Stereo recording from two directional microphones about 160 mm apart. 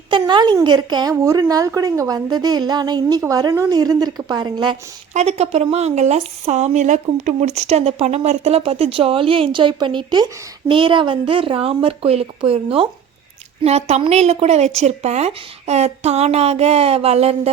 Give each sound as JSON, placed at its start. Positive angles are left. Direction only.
{"t": 0.1, "sound": "a woman's voice", "side_deg": -30}
{"t": 5.1, "sound": "a woman's voice", "side_deg": -40}